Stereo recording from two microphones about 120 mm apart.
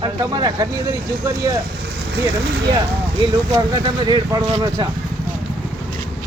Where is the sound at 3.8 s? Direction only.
40° right (ahead or behind).